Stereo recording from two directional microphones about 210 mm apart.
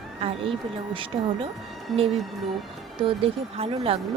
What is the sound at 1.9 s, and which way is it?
Speech, centre (ahead or behind).